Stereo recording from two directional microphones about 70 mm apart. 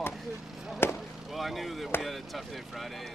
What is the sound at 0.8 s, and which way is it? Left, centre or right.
Speech, left.